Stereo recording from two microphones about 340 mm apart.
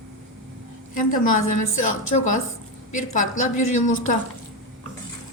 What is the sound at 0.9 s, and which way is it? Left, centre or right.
A woman's voice, left.